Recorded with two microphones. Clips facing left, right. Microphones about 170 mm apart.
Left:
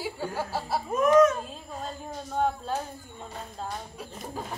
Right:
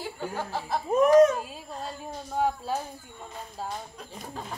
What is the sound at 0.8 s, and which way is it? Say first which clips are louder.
Speech: right 2 dB; 30° right (ahead or behind).